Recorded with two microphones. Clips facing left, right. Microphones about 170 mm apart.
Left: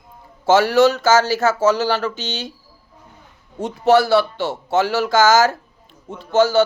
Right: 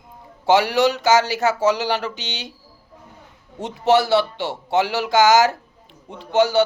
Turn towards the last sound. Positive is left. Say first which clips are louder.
# left 2 dB
turn(degrees=-15)  # may be behind; listen again after turning